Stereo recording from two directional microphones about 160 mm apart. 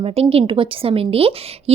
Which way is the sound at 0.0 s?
35° right (ahead or behind).